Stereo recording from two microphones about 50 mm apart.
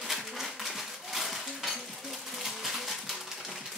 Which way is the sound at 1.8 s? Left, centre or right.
Centre.